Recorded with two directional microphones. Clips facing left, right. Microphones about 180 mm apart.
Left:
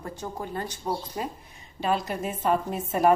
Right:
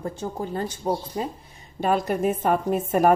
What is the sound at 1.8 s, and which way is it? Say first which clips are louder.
A woman's voice: right 5 dB; 50° right (ahead or behind).